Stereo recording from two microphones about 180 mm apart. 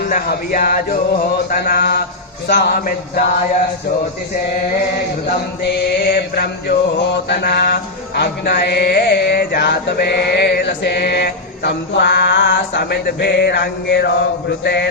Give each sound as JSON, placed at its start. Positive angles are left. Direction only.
{"t": 0.0, "sound": "mantra", "side_deg": 55}
{"t": 5.6, "sound": "mantra", "side_deg": 60}
{"t": 14.6, "sound": "a man's voice", "side_deg": 65}